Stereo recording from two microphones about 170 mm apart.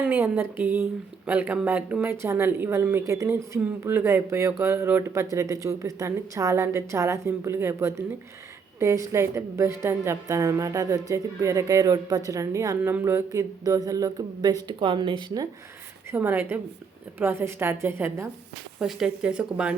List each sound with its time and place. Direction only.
0.0 s a woman's voice: 10° right (ahead or behind); by 15.4 s 25° right (ahead or behind)
16.1 s a woman's voice: 10° right (ahead or behind)